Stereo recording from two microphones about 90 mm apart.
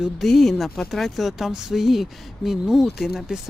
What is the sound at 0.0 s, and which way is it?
Speech, centre (ahead or behind).